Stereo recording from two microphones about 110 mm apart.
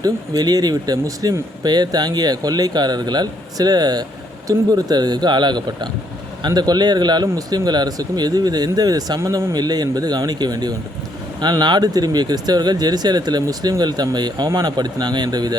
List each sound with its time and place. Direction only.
0.0 s a man's voice: 35° right (ahead or behind)